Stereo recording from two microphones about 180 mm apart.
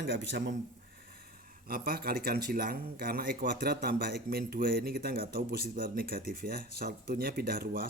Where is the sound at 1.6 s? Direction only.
55° right (ahead or behind).